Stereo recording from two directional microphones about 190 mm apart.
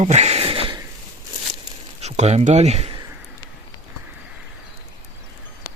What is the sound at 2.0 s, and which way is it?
Speech, 35° right (ahead or behind).